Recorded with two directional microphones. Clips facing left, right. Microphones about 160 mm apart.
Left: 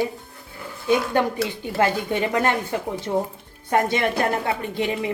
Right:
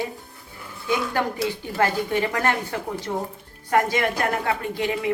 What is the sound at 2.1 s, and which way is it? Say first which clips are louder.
A woman's voice: left 2 dB; 20° left (ahead or behind).